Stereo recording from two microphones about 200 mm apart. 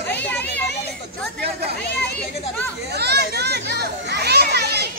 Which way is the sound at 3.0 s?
55° right (ahead or behind).